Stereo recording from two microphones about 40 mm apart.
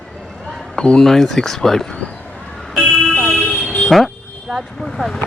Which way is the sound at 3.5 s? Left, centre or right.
Left.